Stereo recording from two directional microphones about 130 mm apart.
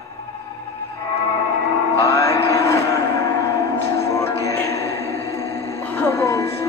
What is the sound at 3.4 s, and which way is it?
Music, 25° left (ahead or behind).